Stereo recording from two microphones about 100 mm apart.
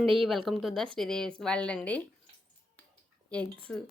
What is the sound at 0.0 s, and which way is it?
Speech, centre (ahead or behind).